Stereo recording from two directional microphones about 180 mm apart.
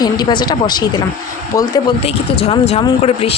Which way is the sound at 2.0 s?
35° left (ahead or behind).